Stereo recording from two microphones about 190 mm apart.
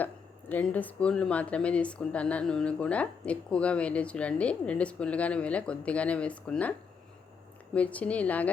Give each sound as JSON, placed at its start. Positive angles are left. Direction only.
{"t": 0.0, "sound": "speech", "side_deg": 10}